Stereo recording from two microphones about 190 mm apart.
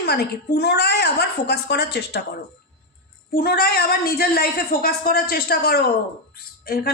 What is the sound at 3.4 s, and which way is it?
A woman's voice, 50° left (ahead or behind).